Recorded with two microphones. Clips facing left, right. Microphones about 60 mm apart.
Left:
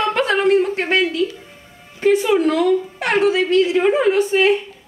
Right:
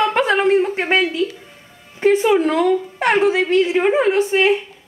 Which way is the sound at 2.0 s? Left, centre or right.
Right.